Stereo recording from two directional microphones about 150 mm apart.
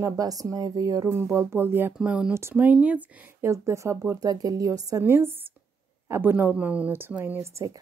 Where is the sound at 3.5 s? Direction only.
20° right (ahead or behind).